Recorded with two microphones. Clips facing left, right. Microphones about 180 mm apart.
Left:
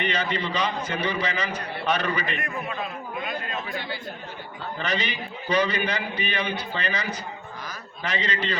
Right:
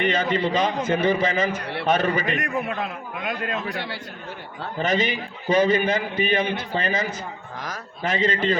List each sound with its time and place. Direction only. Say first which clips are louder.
0.0 s a man's voice: right 5 dB; 50° right (ahead or behind)
2.6 s a man's voice: right 3 dB; 70° right (ahead or behind)
4.8 s a man's voice: right 7 dB; 45° right (ahead or behind)